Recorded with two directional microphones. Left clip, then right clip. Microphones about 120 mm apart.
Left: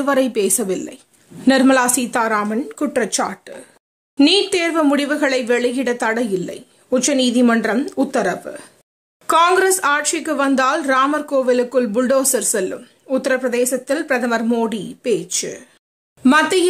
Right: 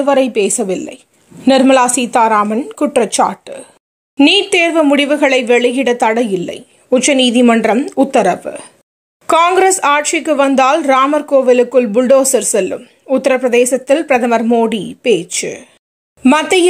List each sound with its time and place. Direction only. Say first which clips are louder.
0.0 s speech: right 5 dB; 10° right (ahead or behind); by 16.5 s 30° right (ahead or behind)